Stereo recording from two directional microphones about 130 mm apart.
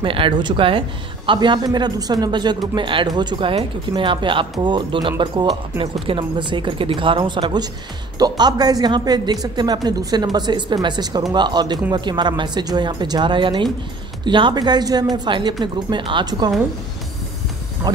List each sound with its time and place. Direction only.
0.0 s speech: 40° right (ahead or behind)
17.8 s speech: 30° right (ahead or behind)